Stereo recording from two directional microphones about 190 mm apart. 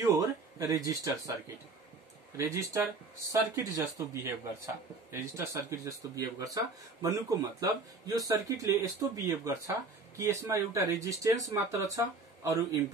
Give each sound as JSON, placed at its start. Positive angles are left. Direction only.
{"t": 0.0, "sound": "speech", "side_deg": -15}
{"t": 2.3, "sound": "speech", "side_deg": -15}